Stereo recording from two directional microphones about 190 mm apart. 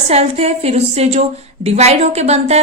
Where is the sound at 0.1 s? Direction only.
35° right (ahead or behind).